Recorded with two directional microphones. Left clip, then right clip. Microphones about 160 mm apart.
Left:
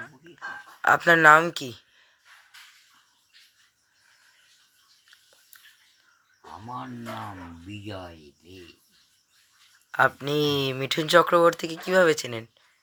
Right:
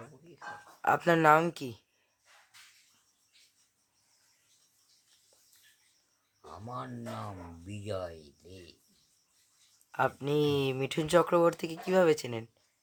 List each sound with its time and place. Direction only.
0.8 s speech: 25° right (ahead or behind)
9.9 s speech: 15° right (ahead or behind)